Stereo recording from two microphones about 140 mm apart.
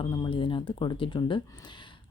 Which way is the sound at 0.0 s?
35° left (ahead or behind).